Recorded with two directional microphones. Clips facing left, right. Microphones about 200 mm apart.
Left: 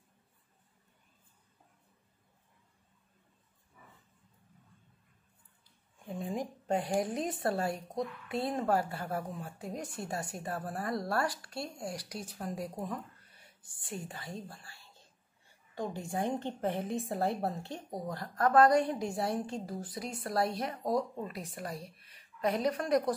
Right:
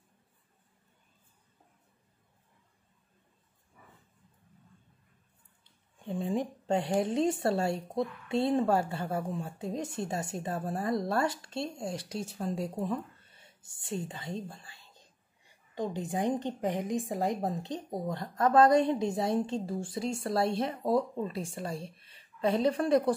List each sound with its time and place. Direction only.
5.6 s a woman's voice: 30° right (ahead or behind)